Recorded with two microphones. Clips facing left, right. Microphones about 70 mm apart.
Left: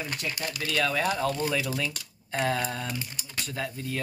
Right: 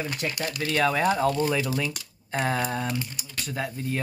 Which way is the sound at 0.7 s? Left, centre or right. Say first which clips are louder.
Right 4 dB; right.